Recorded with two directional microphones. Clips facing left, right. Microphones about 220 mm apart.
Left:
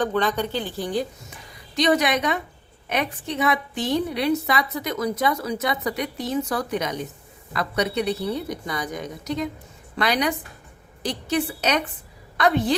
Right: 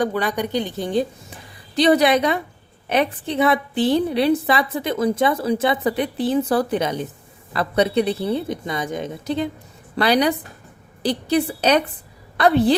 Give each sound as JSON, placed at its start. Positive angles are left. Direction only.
{"t": 0.0, "sound": "a woman's voice", "side_deg": -10}